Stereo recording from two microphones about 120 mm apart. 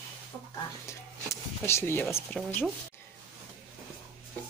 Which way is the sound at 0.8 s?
25° left (ahead or behind).